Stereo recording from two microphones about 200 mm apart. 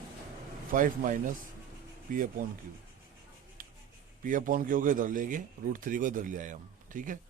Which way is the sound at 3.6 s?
45° right (ahead or behind).